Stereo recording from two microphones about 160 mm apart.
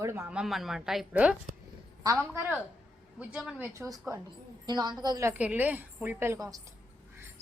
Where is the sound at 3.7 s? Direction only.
20° right (ahead or behind).